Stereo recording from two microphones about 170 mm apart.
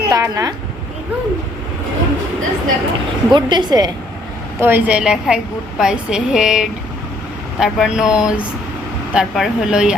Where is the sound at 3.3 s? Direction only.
25° right (ahead or behind).